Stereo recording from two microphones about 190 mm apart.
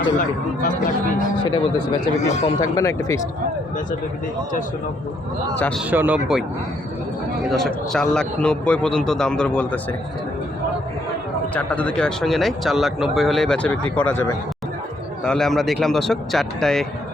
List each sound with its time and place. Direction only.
1.5 s speech: 20° left (ahead or behind)
5.5 s speech: 10° left (ahead or behind)
5.9 s speech: 10° right (ahead or behind)
7.5 s speech: centre (ahead or behind)
11.5 s speech: 5° left (ahead or behind)